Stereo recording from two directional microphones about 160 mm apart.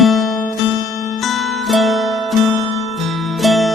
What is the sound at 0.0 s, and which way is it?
Music, centre (ahead or behind).